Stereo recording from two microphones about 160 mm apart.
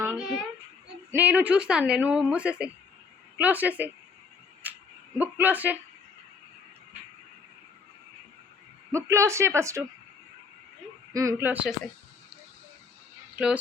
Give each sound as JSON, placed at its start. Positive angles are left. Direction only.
{"t": 0.0, "sound": "a sound", "side_deg": -5}
{"t": 1.1, "sound": "a woman's voice", "side_deg": -10}
{"t": 4.6, "sound": "dog", "side_deg": -10}
{"t": 5.1, "sound": "a woman's voice", "side_deg": -10}
{"t": 8.9, "sound": "a woman's voice", "side_deg": -20}
{"t": 11.1, "sound": "a woman's voice", "side_deg": -20}
{"t": 13.3, "sound": "speech", "side_deg": -5}